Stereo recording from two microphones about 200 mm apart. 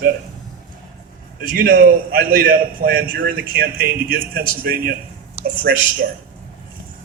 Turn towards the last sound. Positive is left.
turn(degrees=-45)  # may be behind; listen again after turning